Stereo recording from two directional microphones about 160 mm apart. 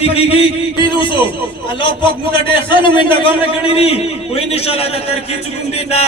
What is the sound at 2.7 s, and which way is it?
A man's voice, 30° left (ahead or behind).